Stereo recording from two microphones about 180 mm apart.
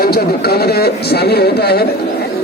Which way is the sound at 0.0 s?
60° left (ahead or behind).